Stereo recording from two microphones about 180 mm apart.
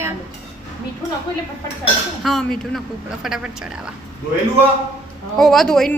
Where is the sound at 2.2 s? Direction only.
Centre (ahead or behind).